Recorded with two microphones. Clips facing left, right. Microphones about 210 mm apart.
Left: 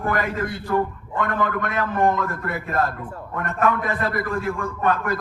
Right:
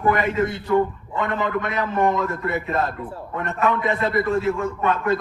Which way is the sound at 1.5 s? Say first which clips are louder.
Right 1 dB; 50° left (ahead or behind).